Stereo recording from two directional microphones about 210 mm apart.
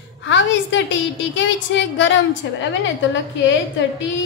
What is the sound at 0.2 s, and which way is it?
A woman's voice, 60° left (ahead or behind).